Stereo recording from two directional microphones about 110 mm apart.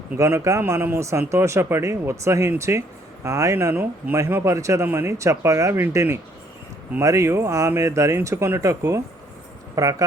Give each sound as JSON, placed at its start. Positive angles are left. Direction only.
{"t": 0.2, "sound": "speech", "side_deg": -25}